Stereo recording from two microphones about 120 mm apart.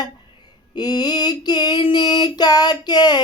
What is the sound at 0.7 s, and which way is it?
Female singing, 35° left (ahead or behind).